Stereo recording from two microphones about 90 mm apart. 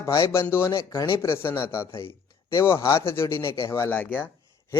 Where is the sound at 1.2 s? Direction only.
30° left (ahead or behind).